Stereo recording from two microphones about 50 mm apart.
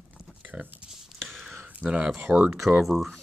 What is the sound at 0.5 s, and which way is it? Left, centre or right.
Speech, right.